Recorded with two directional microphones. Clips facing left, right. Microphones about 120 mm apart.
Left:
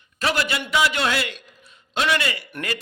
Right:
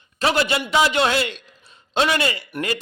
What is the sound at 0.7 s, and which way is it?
A man's voice, 25° right (ahead or behind).